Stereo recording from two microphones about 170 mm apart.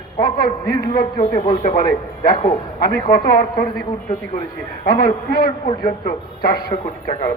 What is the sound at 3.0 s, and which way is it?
Speech, 65° left (ahead or behind).